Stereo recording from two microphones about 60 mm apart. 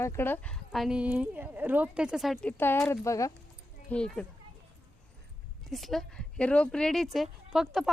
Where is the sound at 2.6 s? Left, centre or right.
Left.